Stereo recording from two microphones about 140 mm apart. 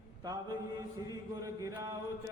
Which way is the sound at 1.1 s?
25° right (ahead or behind).